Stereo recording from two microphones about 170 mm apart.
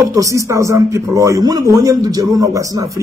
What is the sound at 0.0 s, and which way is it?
Speech, 20° right (ahead or behind).